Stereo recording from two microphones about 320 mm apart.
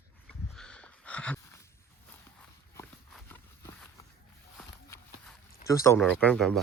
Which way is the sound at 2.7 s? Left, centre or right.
Centre.